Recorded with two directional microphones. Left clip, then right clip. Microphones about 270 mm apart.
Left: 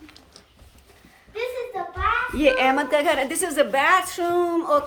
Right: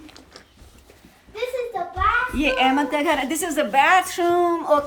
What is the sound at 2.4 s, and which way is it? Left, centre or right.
A woman's voice, centre.